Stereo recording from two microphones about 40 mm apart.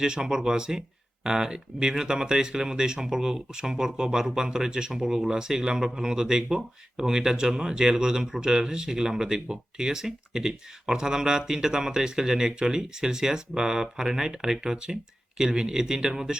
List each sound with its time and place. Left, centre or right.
0.0 s speech: centre